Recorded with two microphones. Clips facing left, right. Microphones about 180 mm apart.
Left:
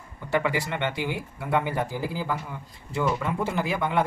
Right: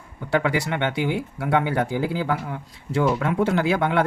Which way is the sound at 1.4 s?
75° right (ahead or behind).